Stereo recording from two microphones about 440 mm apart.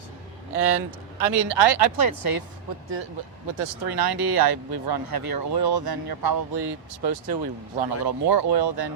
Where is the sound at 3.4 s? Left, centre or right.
Right.